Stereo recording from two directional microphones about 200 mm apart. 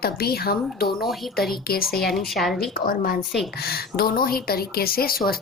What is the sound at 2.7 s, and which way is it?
Speech, 45° left (ahead or behind).